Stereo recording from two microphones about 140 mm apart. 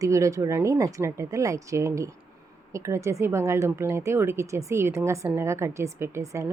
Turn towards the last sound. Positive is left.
turn(degrees=-20)  # may be behind; listen again after turning